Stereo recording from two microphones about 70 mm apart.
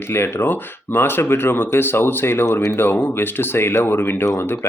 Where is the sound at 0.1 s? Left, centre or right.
Left.